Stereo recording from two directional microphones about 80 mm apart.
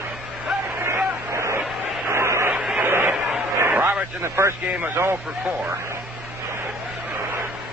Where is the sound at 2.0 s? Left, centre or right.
Right.